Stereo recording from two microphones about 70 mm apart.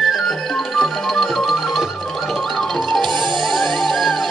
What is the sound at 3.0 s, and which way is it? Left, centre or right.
Music, right.